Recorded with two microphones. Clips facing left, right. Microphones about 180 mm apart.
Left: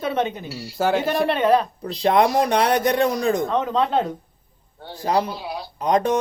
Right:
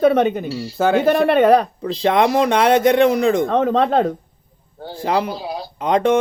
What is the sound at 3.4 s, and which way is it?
Speech, 60° right (ahead or behind).